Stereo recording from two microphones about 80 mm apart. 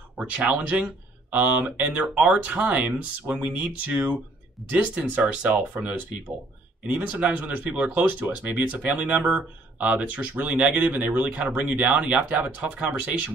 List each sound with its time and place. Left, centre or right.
0.5 s speech: centre